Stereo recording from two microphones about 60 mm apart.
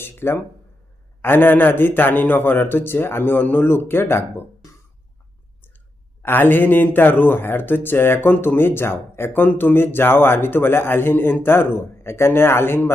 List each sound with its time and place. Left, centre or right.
0.0 s speech: left
6.2 s speech: left